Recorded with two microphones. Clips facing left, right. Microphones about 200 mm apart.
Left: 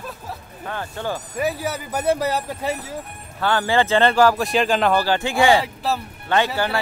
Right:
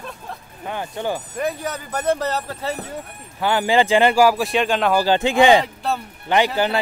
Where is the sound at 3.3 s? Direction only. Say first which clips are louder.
Right 2 dB; 15° right (ahead or behind); by 4.9 s centre (ahead or behind).